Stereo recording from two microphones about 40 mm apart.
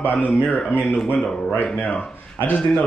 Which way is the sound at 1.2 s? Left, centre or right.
Centre.